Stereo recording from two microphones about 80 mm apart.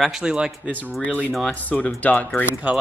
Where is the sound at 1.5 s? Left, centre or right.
Centre.